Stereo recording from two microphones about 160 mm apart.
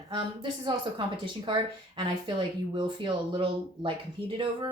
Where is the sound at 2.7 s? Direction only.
30° right (ahead or behind).